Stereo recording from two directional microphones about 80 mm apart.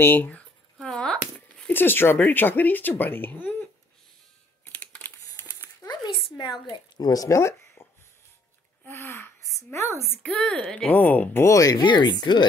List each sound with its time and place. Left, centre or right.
0.0 s speech: left
0.7 s a sound: centre
1.6 s speech: left
4.7 s computer keyboard: centre
5.3 s dog: left
6.7 s speech: left
10.2 s a woman's voice: centre
11.4 s speech: left
11.8 s speech: left